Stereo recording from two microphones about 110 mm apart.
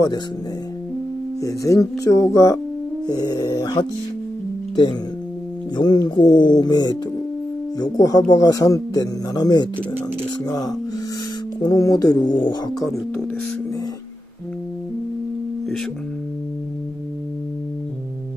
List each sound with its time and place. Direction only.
1.4 s speech: 30° left (ahead or behind)
5.8 s speech: 40° left (ahead or behind)
11.6 s speech: 35° left (ahead or behind)